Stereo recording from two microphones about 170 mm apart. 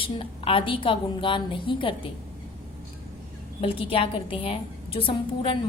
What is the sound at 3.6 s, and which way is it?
A woman's voice, 35° left (ahead or behind).